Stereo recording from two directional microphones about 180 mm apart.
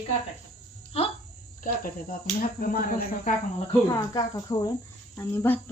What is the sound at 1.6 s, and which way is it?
Speech, 50° left (ahead or behind).